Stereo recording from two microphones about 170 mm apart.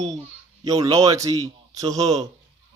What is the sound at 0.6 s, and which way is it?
Speech, 20° right (ahead or behind).